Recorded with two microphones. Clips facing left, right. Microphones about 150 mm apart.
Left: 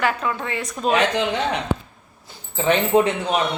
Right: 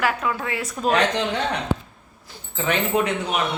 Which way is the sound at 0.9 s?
10° left (ahead or behind).